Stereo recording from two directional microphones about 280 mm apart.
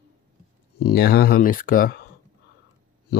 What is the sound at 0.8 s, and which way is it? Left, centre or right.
Speech, left.